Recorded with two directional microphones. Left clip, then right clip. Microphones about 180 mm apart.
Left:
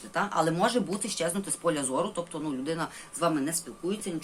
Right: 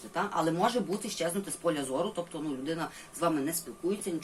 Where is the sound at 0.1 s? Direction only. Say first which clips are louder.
Left 3 dB; 35° left (ahead or behind).